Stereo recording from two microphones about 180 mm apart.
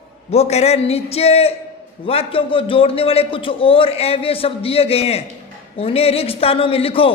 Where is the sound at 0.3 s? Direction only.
35° left (ahead or behind).